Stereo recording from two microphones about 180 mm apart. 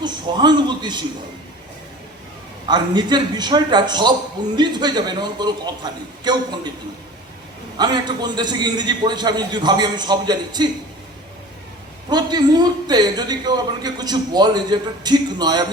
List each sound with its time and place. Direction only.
0.0 s a man's voice: 25° right (ahead or behind)
2.6 s a man's voice: 25° right (ahead or behind)
7.8 s a man's voice: 25° right (ahead or behind)
12.0 s a man's voice: 25° right (ahead or behind)